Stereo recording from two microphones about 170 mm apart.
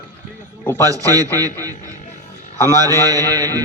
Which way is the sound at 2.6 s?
20° right (ahead or behind).